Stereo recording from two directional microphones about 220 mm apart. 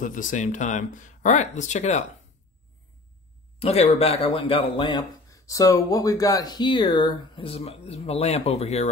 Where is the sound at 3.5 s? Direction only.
30° left (ahead or behind).